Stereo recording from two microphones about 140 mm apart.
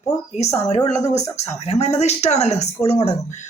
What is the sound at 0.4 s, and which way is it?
A woman's voice, 55° left (ahead or behind).